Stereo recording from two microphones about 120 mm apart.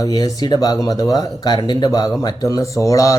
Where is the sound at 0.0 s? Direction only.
30° left (ahead or behind).